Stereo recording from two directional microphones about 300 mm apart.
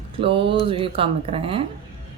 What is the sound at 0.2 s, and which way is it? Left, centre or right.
Speech, centre.